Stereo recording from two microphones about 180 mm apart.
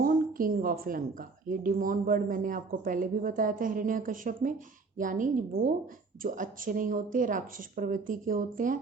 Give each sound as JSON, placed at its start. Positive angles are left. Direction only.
{"t": 0.0, "sound": "a woman's voice", "side_deg": -50}